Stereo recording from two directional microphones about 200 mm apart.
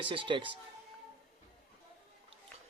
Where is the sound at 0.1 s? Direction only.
25° right (ahead or behind).